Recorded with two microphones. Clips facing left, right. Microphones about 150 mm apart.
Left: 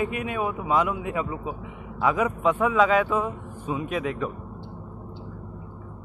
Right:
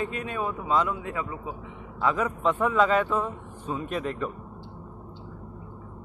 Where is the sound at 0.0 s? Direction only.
15° left (ahead or behind).